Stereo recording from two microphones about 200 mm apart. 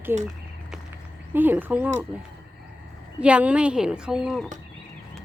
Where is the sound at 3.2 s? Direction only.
5° right (ahead or behind).